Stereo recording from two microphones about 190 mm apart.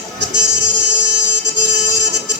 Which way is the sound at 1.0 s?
65° right (ahead or behind).